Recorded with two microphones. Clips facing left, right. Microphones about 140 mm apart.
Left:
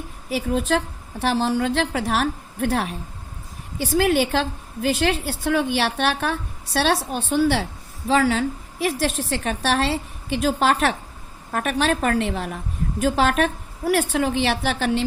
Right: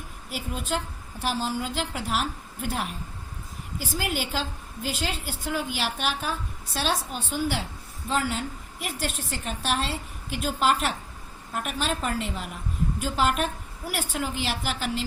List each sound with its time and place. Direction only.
0.3 s a woman's voice: 80° left
1.2 s a woman's voice: 70° left (ahead or behind)